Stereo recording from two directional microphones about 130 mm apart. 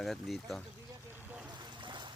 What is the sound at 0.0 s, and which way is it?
Speech, centre (ahead or behind).